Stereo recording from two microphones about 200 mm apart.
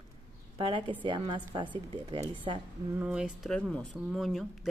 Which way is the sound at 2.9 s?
5° right (ahead or behind).